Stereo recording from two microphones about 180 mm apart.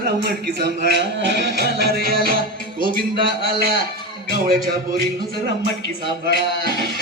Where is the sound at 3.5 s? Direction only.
60° right (ahead or behind).